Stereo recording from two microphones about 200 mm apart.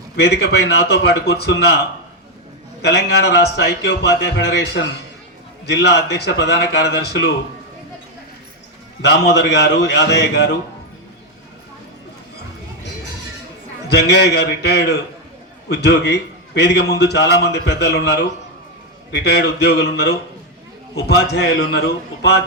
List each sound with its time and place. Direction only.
0.2 s a man's voice: 55° left (ahead or behind)
2.8 s a man's voice: 55° left (ahead or behind)
9.0 s a man's voice: 55° left (ahead or behind)
13.9 s a man's voice: 55° left (ahead or behind)